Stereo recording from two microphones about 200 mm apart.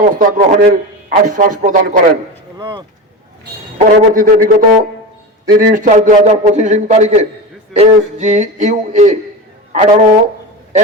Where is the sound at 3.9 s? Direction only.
45° right (ahead or behind).